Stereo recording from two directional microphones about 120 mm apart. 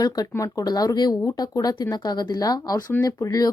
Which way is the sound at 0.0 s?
30° left (ahead or behind).